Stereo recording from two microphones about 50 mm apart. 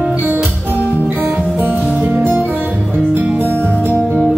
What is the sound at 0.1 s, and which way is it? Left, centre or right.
Music, right.